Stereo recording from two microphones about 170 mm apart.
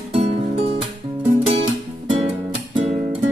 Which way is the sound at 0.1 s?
40° right (ahead or behind).